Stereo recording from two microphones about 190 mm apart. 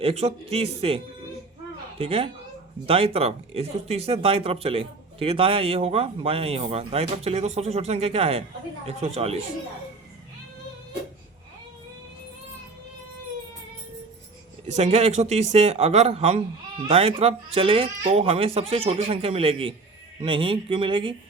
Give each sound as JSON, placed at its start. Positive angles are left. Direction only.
{"t": 0.0, "sound": "speech", "side_deg": -35}
{"t": 14.7, "sound": "speech", "side_deg": -35}